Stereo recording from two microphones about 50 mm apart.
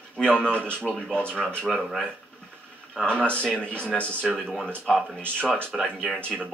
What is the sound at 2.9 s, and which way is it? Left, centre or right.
Speech, centre.